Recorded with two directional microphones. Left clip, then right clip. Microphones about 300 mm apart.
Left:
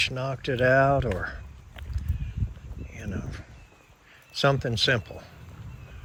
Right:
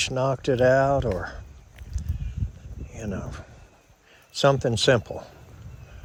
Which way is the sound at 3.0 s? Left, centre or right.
Centre.